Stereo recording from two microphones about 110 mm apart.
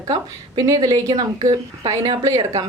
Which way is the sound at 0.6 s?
35° right (ahead or behind).